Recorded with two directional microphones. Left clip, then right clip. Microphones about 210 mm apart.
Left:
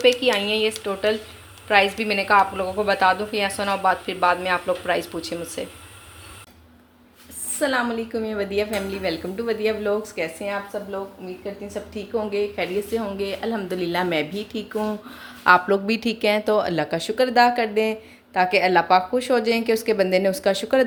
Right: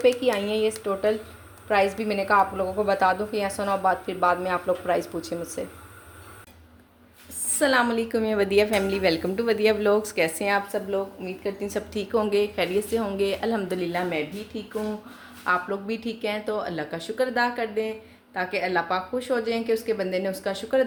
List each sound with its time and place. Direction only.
0.2 s a woman's voice: 5° right (ahead or behind)
7.6 s a woman's voice: 15° right (ahead or behind)
13.7 s a woman's voice: 10° left (ahead or behind)
13.9 s speech: 30° left (ahead or behind)
15.4 s a woman's voice: 40° left (ahead or behind)